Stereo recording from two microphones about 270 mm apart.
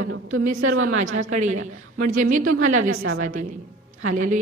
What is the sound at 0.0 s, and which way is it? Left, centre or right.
Speech, right.